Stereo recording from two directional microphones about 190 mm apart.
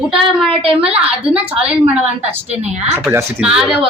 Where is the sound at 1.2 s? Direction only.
5° right (ahead or behind).